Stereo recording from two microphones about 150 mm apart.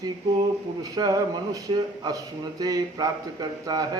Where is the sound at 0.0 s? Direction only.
25° right (ahead or behind).